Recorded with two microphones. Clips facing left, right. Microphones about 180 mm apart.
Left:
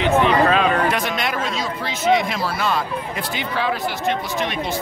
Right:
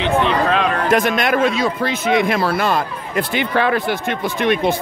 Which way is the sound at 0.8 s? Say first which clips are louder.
Right 6 dB; 50° right (ahead or behind).